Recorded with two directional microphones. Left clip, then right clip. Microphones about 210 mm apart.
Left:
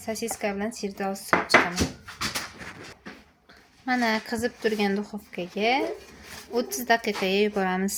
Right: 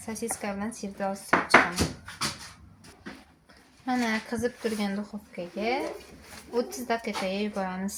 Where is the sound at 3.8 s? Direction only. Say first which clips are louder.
Left 4 dB; 20° left (ahead or behind).